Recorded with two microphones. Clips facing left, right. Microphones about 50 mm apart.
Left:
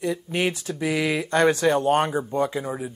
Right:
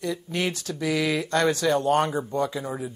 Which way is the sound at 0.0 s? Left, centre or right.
Left.